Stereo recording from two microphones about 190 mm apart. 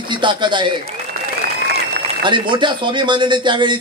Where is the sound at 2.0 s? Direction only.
25° right (ahead or behind).